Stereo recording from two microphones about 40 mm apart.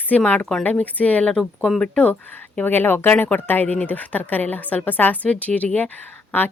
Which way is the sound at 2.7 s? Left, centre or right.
Left.